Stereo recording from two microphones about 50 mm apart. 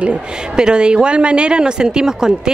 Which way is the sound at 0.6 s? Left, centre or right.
Centre.